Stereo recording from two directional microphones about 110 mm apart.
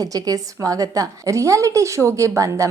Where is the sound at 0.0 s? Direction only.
35° right (ahead or behind).